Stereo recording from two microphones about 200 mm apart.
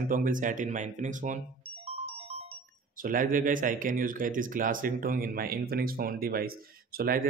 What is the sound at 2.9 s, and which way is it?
Speech, 45° right (ahead or behind).